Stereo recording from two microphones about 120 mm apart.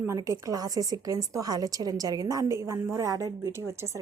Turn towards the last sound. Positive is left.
turn(degrees=-30)  # may be behind; listen again after turning